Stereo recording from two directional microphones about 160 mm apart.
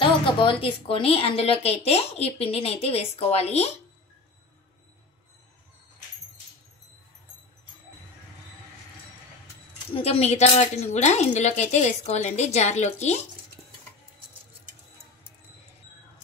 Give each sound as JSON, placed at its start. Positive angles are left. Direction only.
{"t": 0.0, "sound": "speech", "side_deg": 35}
{"t": 9.9, "sound": "speech", "side_deg": 40}